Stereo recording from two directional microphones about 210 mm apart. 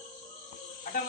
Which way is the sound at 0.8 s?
35° left (ahead or behind).